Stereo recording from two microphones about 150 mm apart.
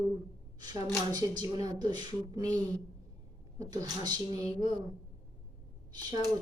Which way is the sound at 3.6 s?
25° right (ahead or behind).